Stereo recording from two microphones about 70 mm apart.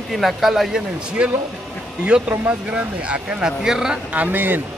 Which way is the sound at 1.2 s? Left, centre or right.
Centre.